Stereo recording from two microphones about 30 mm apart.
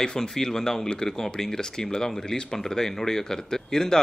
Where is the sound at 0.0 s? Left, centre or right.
Left.